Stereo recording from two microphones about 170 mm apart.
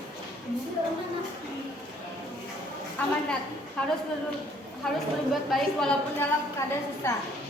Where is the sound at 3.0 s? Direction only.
10° left (ahead or behind).